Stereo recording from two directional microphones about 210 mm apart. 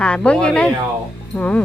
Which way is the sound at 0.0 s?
5° left (ahead or behind).